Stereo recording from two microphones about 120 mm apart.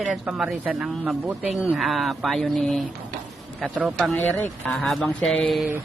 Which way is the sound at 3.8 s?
10° right (ahead or behind).